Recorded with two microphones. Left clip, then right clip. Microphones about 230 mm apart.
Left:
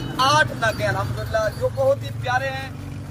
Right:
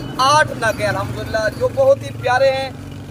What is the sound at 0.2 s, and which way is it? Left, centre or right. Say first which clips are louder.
Speech: right 4 dB; centre.